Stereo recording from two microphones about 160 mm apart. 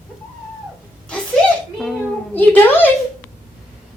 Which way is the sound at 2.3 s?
10° left (ahead or behind).